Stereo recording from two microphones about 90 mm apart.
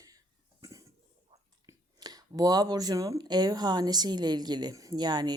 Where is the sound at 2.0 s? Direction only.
45° right (ahead or behind).